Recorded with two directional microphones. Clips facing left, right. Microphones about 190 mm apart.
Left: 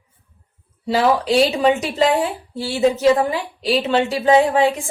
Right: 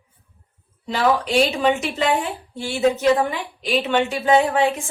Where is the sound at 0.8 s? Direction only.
35° left (ahead or behind).